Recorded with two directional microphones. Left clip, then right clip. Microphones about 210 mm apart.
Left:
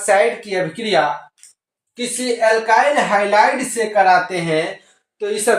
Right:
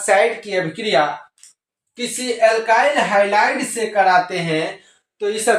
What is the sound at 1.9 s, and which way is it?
Speech, 15° right (ahead or behind).